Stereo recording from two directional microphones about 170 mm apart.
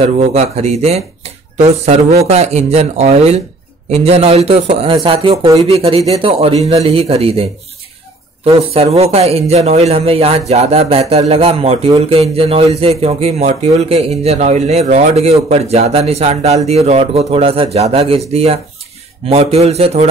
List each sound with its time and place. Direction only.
0.0 s speech: 40° right (ahead or behind)
8.5 s speech: 35° right (ahead or behind)